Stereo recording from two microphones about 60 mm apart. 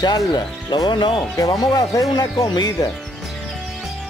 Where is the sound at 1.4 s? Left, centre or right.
Left.